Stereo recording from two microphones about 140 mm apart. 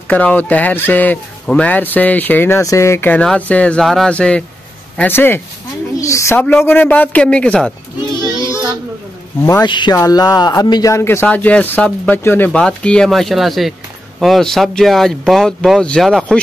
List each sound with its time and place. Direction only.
0.1 s a woman's voice: 10° left (ahead or behind)
9.7 s speech: 35° left (ahead or behind); by 16.3 s centre (ahead or behind)